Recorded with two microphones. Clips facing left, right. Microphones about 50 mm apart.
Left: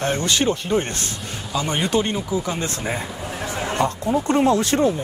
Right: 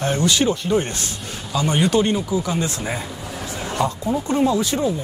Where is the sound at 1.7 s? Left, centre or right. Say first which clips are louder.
Right 4 dB; centre.